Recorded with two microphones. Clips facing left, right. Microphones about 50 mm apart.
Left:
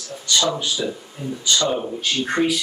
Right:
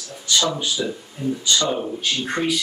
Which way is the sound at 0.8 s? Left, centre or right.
Centre.